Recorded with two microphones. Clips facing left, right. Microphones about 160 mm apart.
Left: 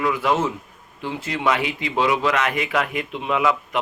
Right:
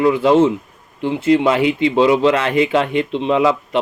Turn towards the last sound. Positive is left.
turn(degrees=-30)  # may be behind; listen again after turning